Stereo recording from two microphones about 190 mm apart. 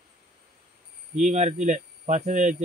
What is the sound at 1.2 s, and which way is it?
A man's voice, 40° right (ahead or behind).